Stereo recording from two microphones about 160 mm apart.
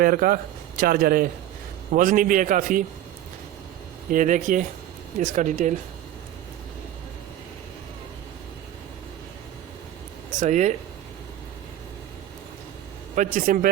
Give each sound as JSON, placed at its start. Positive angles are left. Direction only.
{"t": 0.0, "sound": "a man's voice", "side_deg": -60}
{"t": 4.1, "sound": "speech", "side_deg": -55}
{"t": 10.4, "sound": "speech", "side_deg": -50}
{"t": 13.1, "sound": "a man's voice", "side_deg": -55}